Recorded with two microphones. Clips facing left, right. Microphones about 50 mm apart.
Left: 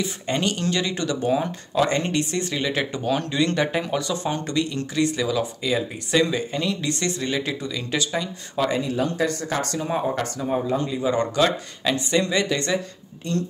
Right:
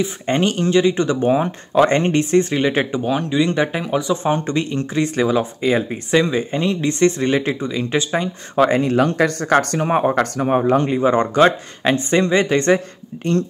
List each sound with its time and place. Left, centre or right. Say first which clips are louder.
0.0 s speech: right 6 dB; right
2.9 s speech: right 5 dB; centre; by 13.5 s right